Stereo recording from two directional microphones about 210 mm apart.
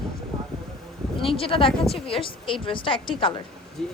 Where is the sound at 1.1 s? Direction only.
25° left (ahead or behind).